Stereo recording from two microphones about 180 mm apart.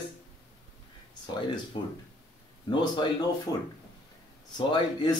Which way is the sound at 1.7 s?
25° left (ahead or behind).